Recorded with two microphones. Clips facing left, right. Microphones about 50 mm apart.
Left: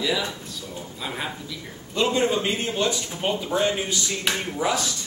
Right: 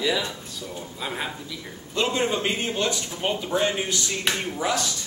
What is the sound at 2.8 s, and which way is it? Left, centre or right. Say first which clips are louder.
A man's voice: left 1 dB; centre.